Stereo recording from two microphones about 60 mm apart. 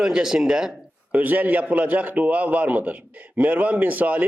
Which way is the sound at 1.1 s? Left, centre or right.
Right.